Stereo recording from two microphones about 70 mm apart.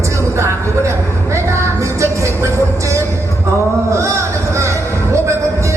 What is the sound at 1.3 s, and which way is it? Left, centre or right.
Music, right.